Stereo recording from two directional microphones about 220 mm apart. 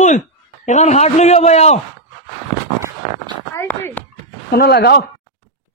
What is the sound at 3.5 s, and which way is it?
Speech, 10° left (ahead or behind).